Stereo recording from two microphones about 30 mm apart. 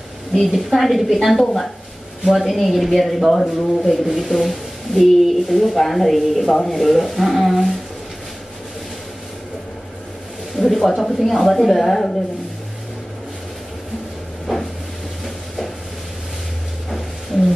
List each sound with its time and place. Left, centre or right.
0.3 s speech: centre
1.3 s speech: centre
2.2 s speech: centre
6.5 s speech: centre
6.8 s speech: centre
10.5 s speech: centre
14.5 s cupboard open or close: centre
15.2 s a sound: centre